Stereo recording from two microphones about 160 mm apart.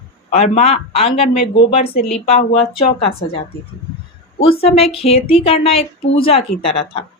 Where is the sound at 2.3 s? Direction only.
40° left (ahead or behind).